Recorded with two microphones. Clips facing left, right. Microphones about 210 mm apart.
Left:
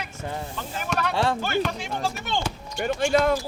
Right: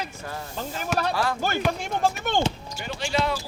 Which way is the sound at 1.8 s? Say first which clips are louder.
Right 4 dB; 50° right (ahead or behind).